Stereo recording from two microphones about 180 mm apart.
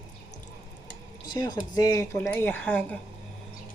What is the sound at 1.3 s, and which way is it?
Speech, 20° left (ahead or behind).